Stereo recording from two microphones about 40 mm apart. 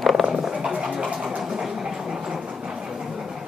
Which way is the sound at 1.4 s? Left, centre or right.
Centre.